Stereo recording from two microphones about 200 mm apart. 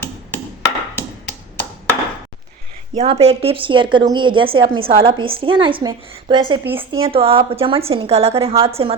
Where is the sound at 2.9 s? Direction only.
30° right (ahead or behind).